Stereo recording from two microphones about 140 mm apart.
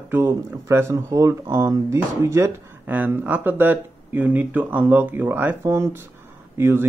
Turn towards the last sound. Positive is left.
turn(degrees=-15)  # may be behind; listen again after turning